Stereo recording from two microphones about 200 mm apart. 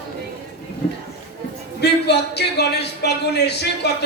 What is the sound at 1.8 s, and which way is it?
Speech, 55° left (ahead or behind).